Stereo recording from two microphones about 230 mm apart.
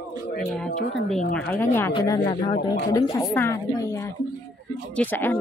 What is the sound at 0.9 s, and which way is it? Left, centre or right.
A woman's voice, centre.